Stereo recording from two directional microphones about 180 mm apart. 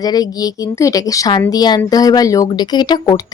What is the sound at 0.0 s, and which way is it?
Speech, 20° left (ahead or behind).